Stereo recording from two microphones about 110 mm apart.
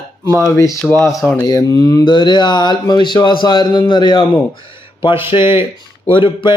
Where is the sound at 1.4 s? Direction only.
35° left (ahead or behind).